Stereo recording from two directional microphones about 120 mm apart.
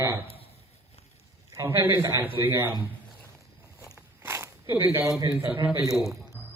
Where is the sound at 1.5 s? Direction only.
20° right (ahead or behind).